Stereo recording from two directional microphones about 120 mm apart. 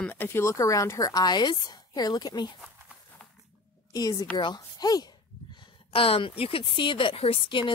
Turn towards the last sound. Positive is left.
turn(degrees=45)  # may be behind; listen again after turning